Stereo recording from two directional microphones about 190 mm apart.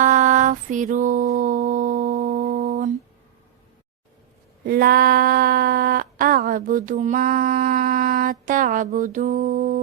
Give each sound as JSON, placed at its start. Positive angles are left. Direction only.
{"t": 0.0, "sound": "music", "side_deg": -40}
{"t": 2.6, "sound": "humming", "side_deg": -40}
{"t": 4.6, "sound": "a sound", "side_deg": -55}